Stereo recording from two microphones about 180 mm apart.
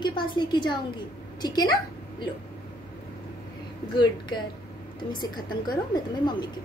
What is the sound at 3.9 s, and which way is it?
A woman's voice, 25° left (ahead or behind).